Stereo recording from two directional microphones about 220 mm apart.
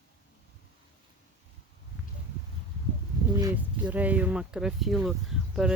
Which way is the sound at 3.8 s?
5° right (ahead or behind).